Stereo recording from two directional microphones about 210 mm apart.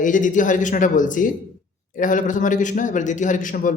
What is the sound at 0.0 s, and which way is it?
A man's voice, 40° left (ahead or behind).